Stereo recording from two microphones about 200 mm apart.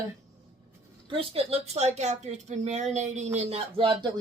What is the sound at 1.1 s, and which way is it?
Speech, 30° right (ahead or behind).